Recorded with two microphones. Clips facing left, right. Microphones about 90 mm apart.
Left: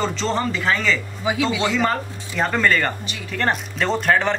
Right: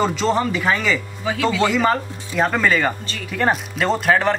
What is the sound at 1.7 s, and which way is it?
Speech, 5° right (ahead or behind).